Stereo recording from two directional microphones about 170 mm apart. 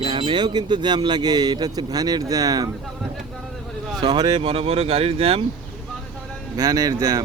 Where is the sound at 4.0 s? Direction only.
25° right (ahead or behind).